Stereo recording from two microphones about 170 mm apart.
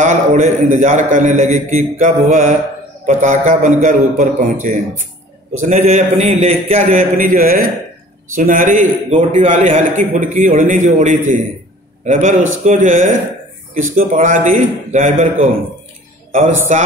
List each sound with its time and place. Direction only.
0.0 s a man's voice: 45° right (ahead or behind)